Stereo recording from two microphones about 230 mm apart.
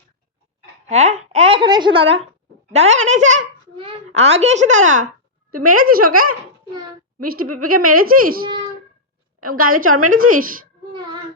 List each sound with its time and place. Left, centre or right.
0.9 s a woman's voice: right
7.4 s a woman's voice: right
7.8 s a child's voice: right
9.4 s a woman's voice: right
10.1 s a child's voice: right
10.9 s child singing: centre